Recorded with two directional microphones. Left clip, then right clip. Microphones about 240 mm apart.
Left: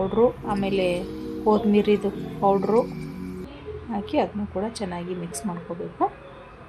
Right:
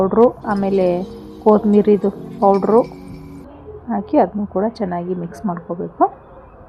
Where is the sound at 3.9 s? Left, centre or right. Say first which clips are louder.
Right 9 dB; centre.